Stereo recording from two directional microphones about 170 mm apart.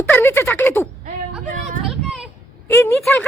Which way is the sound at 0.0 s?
15° left (ahead or behind).